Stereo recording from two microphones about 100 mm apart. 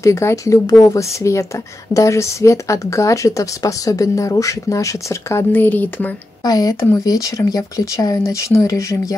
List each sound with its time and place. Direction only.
0.0 s speech: 30° left (ahead or behind)
6.4 s speech: 40° left (ahead or behind)